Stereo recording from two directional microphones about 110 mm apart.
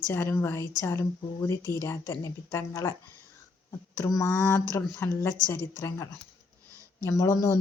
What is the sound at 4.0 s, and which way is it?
A man's voice, 30° left (ahead or behind).